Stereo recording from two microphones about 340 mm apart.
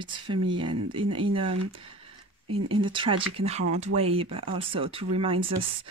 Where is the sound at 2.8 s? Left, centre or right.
Centre.